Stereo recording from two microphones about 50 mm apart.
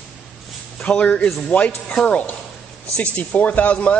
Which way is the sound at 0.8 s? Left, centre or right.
Left.